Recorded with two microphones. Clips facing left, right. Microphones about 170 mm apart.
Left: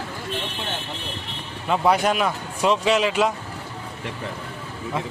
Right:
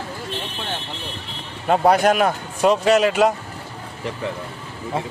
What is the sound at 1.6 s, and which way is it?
Speech, 45° right (ahead or behind).